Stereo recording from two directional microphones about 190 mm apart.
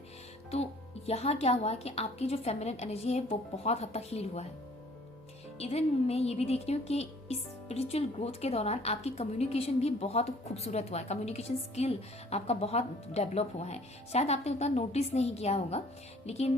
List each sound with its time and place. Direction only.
0.5 s speech: 35° left (ahead or behind)
5.5 s speech: 35° left (ahead or behind)